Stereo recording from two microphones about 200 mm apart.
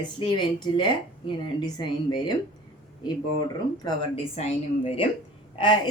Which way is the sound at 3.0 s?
20° left (ahead or behind).